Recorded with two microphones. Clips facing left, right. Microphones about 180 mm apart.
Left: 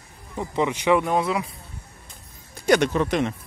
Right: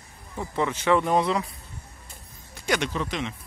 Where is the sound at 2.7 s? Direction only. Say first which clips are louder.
Left 8 dB; 55° left (ahead or behind).